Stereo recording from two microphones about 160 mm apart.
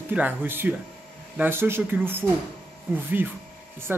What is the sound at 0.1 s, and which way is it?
A man's voice, 10° right (ahead or behind).